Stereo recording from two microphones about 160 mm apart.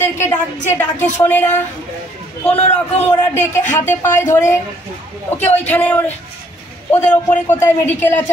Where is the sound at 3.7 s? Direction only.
15° left (ahead or behind).